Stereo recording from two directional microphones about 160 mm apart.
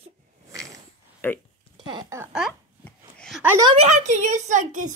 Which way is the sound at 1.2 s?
15° left (ahead or behind).